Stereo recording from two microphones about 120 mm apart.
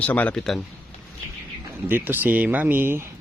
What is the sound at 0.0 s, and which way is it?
Speech, 10° left (ahead or behind).